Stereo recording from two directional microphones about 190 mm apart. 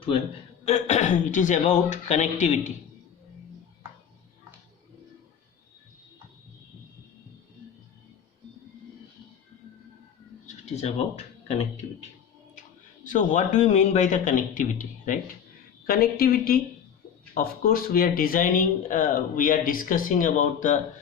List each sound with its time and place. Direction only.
0.6 s speech: 35° left (ahead or behind)
10.4 s bird: 35° left (ahead or behind)
13.1 s speech: 40° left (ahead or behind)